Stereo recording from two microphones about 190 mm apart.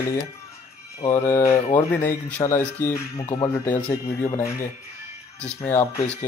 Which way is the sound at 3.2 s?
25° left (ahead or behind).